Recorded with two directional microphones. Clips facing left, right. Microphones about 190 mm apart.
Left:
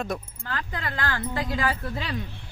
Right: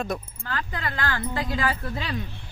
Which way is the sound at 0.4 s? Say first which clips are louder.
Right 1 dB; 20° left (ahead or behind).